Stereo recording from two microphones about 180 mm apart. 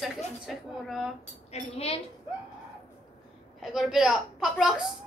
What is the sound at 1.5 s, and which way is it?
Speech, 35° left (ahead or behind).